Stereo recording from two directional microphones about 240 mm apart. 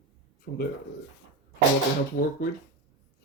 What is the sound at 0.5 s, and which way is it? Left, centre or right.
Speech, left.